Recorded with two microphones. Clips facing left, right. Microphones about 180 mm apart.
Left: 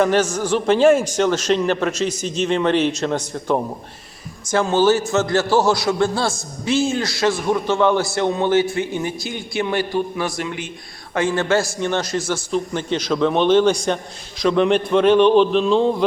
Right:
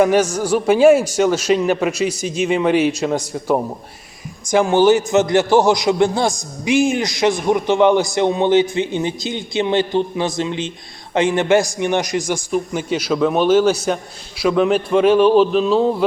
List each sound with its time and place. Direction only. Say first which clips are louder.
0.0 s a man's voice: right 3 dB; 10° right (ahead or behind)